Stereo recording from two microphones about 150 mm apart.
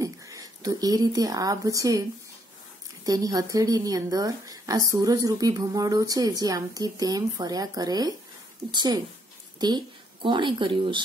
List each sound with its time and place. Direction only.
0.0 s speech: 20° right (ahead or behind)
3.1 s a woman's voice: 25° right (ahead or behind)